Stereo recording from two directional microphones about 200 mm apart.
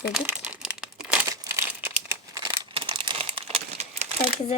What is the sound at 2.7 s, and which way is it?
Crumpling, 25° right (ahead or behind).